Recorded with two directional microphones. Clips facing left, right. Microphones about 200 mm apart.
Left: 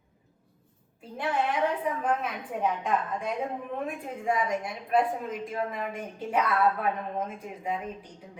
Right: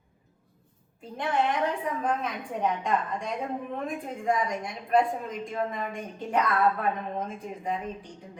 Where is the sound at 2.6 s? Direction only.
5° left (ahead or behind).